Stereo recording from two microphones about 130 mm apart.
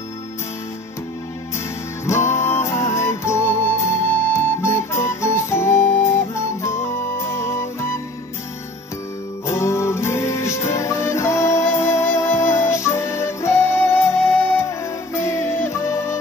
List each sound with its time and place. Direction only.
2.0 s music: 20° left (ahead or behind)
9.5 s music: 20° left (ahead or behind)